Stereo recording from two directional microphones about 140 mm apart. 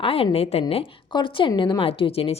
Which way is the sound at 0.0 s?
40° left (ahead or behind).